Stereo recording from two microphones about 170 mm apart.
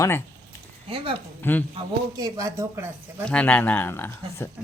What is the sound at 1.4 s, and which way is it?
Speech, 10° left (ahead or behind).